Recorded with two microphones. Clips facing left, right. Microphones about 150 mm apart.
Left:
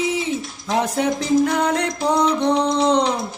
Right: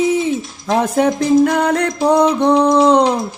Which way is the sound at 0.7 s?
55° right (ahead or behind).